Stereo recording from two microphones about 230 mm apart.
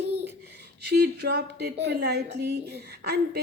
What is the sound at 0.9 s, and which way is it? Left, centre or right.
A woman's voice, right.